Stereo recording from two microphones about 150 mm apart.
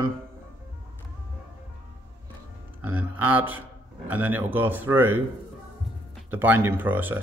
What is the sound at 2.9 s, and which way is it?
Speech, 15° right (ahead or behind).